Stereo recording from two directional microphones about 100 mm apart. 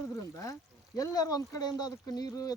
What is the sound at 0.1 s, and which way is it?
Speech, 35° left (ahead or behind).